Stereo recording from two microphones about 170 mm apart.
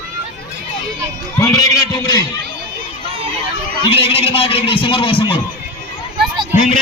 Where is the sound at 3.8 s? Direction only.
30° left (ahead or behind).